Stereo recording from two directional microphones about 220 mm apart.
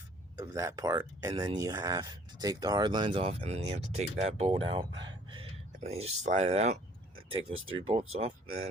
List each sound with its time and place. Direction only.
0.3 s speech: 15° right (ahead or behind)
7.5 s speech: 65° right (ahead or behind)
8.2 s speech: 30° right (ahead or behind)